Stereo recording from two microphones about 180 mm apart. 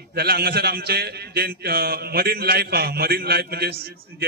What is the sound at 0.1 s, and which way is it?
A man's voice, 60° right (ahead or behind).